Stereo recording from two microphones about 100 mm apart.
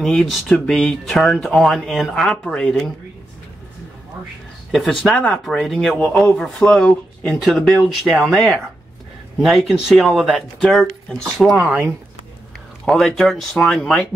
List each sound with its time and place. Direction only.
0.0 s speech: 5° left (ahead or behind)
4.7 s speech: centre (ahead or behind)
12.8 s speech: centre (ahead or behind)